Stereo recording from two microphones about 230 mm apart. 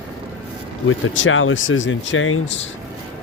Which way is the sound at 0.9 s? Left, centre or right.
Left.